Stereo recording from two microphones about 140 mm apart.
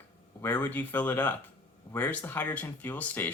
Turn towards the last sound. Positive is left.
turn(degrees=15)  # may be behind; listen again after turning